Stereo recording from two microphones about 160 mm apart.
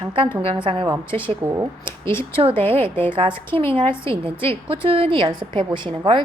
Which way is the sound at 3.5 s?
35° right (ahead or behind).